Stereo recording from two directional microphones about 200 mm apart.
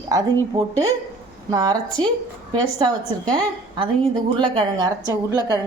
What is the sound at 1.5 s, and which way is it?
Speech, 20° right (ahead or behind).